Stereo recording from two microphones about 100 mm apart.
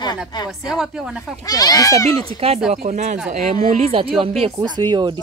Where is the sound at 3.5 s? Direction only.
80° right.